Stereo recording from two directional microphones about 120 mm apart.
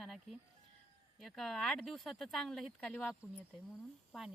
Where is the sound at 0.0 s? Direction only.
Centre (ahead or behind).